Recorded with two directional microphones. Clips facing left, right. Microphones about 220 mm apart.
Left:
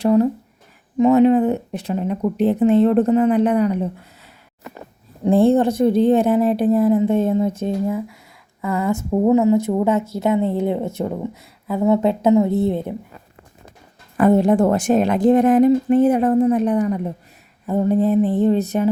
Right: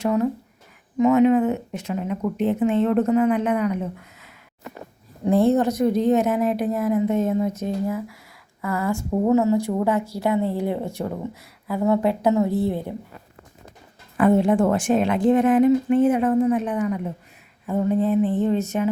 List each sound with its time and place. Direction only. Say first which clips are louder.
0.0 s speech: left 6 dB; 30° left (ahead or behind)
5.2 s speech: left 4 dB; 30° left (ahead or behind)
14.2 s speech: left 3 dB; 40° left (ahead or behind)